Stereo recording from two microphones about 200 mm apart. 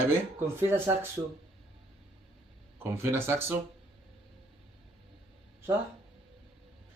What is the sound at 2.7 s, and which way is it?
Speech, 10° right (ahead or behind).